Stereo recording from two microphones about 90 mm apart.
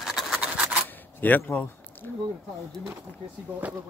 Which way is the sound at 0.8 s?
20° left (ahead or behind).